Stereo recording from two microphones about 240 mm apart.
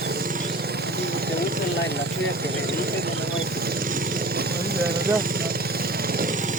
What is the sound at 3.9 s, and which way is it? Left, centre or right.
Vehicle, right.